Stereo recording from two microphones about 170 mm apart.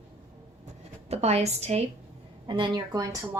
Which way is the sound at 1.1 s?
40° right (ahead or behind).